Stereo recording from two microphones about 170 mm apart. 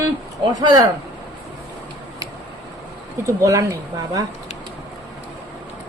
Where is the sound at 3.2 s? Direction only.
20° right (ahead or behind).